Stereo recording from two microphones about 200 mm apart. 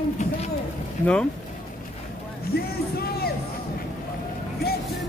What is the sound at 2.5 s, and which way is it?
Speech, 50° left (ahead or behind).